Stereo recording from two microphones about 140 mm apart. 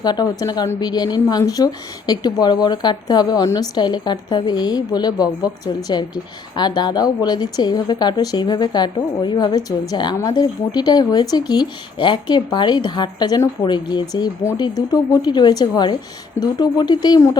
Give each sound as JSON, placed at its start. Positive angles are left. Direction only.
{"t": 0.0, "sound": "speech", "side_deg": 30}